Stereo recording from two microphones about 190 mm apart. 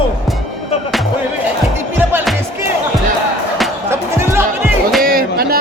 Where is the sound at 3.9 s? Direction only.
15° right (ahead or behind).